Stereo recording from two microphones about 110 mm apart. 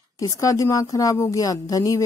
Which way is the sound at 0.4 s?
30° left (ahead or behind).